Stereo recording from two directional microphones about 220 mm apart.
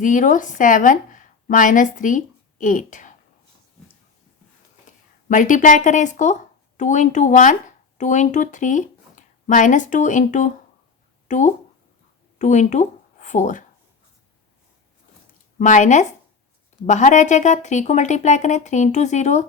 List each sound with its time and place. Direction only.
0.0 s a woman's voice: 35° left (ahead or behind)
5.3 s a woman's voice: 35° left (ahead or behind)
15.5 s speech: 35° left (ahead or behind)